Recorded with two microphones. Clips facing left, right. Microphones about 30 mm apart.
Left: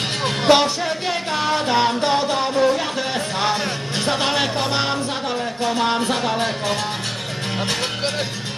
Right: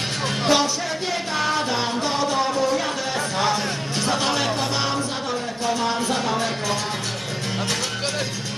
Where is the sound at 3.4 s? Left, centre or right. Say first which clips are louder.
Left 1 dB; left.